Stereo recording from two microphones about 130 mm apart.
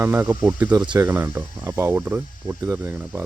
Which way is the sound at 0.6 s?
10° right (ahead or behind).